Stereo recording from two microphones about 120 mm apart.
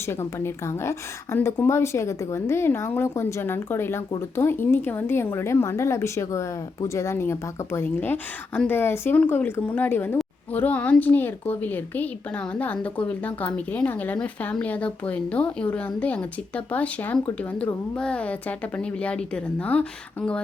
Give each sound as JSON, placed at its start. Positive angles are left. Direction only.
{"t": 0.0, "sound": "a woman's voice", "side_deg": 20}